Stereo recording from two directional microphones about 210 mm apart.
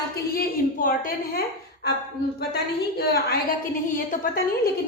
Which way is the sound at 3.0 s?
50° left (ahead or behind).